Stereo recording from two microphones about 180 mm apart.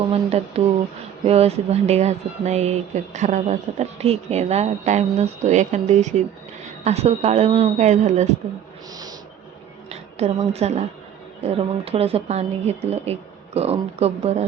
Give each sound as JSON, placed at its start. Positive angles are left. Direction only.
{"t": 0.1, "sound": "speech", "side_deg": -35}
{"t": 9.9, "sound": "a woman's voice", "side_deg": -35}